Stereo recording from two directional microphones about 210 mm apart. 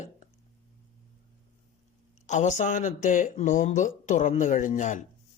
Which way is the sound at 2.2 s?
35° left (ahead or behind).